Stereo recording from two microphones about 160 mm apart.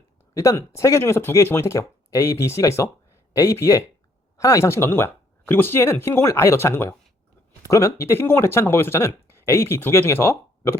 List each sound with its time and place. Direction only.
0.3 s speech: 20° left (ahead or behind)